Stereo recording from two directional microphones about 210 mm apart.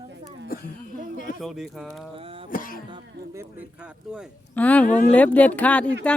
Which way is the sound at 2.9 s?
15° right (ahead or behind).